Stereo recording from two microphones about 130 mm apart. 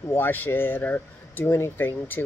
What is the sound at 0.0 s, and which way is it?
Speech, 15° left (ahead or behind).